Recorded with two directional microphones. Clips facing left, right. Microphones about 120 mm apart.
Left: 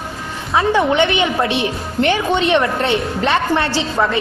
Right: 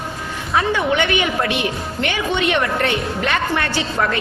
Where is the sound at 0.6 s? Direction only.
30° left (ahead or behind).